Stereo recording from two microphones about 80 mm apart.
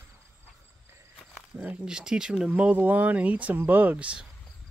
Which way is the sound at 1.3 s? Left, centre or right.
Centre.